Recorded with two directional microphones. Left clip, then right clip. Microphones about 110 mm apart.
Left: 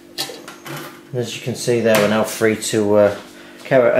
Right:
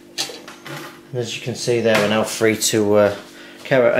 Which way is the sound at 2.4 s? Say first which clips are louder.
Right 1 dB; 35° right (ahead or behind).